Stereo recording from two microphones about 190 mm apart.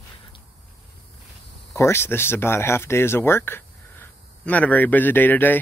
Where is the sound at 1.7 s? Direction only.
15° left (ahead or behind).